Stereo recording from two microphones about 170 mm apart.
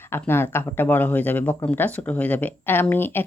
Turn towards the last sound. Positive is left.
turn(degrees=10)  # may be behind; listen again after turning